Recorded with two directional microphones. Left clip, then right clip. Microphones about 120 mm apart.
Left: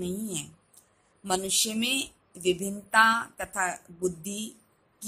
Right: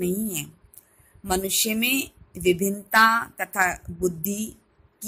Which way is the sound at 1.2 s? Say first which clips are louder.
Right 3 dB; 20° right (ahead or behind).